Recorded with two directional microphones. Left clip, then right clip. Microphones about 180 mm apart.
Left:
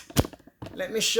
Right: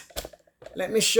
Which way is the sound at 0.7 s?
25° right (ahead or behind).